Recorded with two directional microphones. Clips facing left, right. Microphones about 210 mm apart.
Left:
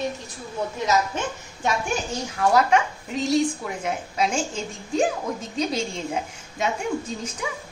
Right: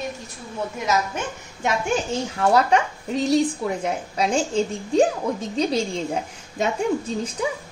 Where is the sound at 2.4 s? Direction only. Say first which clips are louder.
Right 1 dB; 30° right (ahead or behind).